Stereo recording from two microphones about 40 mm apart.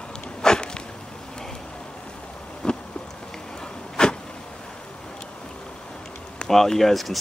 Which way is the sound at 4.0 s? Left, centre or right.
Centre.